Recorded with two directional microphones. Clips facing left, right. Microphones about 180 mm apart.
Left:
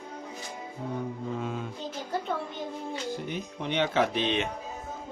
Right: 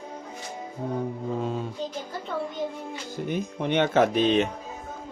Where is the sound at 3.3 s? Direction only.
50° right (ahead or behind).